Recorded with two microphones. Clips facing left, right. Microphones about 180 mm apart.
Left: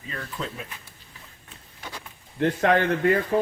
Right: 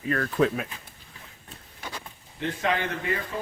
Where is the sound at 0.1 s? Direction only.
60° right (ahead or behind).